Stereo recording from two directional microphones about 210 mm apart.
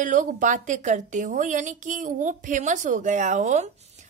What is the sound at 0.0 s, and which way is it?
A woman's voice, 40° right (ahead or behind).